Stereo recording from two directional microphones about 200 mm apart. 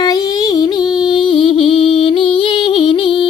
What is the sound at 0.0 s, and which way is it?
Music, 20° left (ahead or behind).